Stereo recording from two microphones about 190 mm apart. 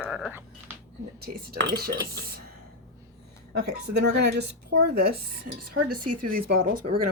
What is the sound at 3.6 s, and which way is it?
A woman's voice, 60° right (ahead or behind).